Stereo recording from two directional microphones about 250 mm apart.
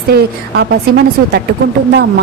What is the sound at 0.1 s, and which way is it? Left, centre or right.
Speech, right.